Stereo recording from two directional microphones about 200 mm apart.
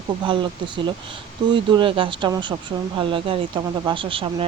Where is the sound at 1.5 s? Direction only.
25° right (ahead or behind).